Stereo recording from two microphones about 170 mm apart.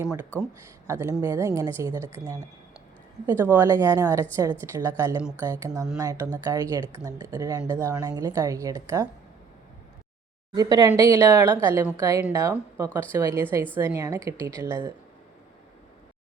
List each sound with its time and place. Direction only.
0.9 s speech: 15° right (ahead or behind)
3.2 s speech: 15° right (ahead or behind)
10.5 s speech: 20° right (ahead or behind)